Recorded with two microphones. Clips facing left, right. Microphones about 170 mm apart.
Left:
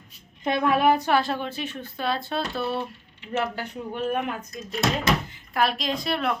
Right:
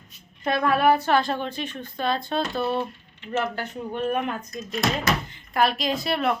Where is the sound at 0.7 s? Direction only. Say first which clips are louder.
Right 1 dB; 15° left (ahead or behind).